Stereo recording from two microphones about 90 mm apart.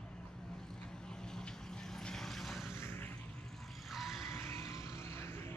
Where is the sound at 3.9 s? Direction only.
Centre (ahead or behind).